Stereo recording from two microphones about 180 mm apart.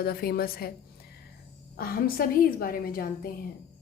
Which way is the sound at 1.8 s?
55° left (ahead or behind).